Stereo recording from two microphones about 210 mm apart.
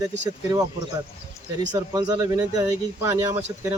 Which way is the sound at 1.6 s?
20° right (ahead or behind).